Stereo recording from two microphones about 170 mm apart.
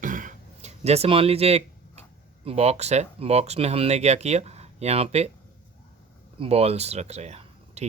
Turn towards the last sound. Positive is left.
turn(degrees=-40)  # may be behind; listen again after turning